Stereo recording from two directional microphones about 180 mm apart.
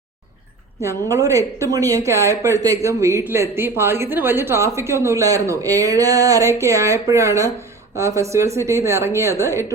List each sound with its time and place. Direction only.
0.8 s a woman's voice: 15° right (ahead or behind)